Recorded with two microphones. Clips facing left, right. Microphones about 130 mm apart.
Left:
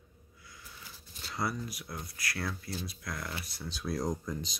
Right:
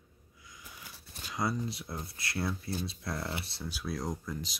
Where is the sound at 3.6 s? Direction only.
5° right (ahead or behind).